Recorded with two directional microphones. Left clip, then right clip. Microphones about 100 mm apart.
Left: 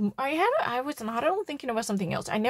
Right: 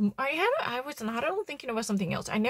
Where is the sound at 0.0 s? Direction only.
40° left (ahead or behind).